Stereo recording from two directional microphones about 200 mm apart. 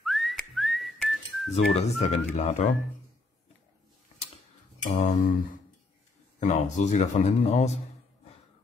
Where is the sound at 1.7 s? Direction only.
30° left (ahead or behind).